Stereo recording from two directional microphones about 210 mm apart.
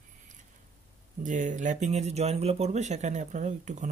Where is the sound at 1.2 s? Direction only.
35° right (ahead or behind).